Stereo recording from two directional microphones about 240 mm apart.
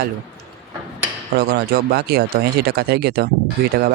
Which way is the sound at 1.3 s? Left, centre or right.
Right.